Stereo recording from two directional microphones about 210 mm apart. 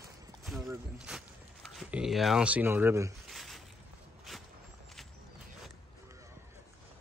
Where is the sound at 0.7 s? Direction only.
Centre (ahead or behind).